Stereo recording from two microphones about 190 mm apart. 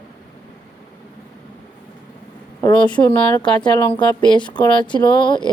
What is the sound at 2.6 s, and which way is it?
Speech, 25° left (ahead or behind).